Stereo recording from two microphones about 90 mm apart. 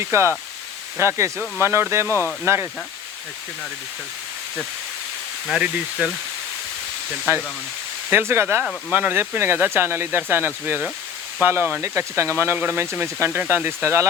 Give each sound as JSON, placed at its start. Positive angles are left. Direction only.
{"t": 0.0, "sound": "speech", "side_deg": -30}
{"t": 5.5, "sound": "speech", "side_deg": -10}
{"t": 7.3, "sound": "speech", "side_deg": -30}
{"t": 12.8, "sound": "speech", "side_deg": -30}